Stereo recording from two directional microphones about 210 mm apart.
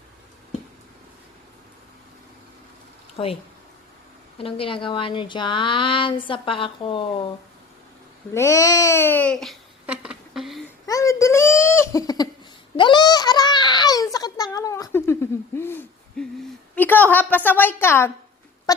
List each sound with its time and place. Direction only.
3.2 s speech: 25° left (ahead or behind)
4.4 s speech: 25° left (ahead or behind)
8.3 s babbling: 15° left (ahead or behind)
10.8 s giggle: 15° left (ahead or behind)
12.7 s a sound: 20° left (ahead or behind)
16.7 s a woman's voice: 10° left (ahead or behind)